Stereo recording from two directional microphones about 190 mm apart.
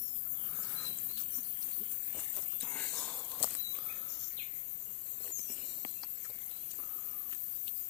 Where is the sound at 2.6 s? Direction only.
5° left (ahead or behind).